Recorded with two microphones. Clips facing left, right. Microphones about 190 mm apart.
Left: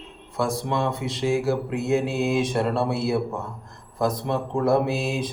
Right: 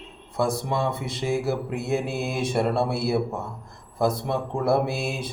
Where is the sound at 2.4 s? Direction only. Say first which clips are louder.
Even; 10° right (ahead or behind).